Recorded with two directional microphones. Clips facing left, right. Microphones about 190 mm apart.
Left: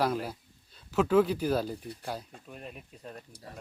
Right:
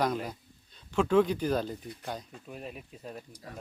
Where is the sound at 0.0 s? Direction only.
5° left (ahead or behind).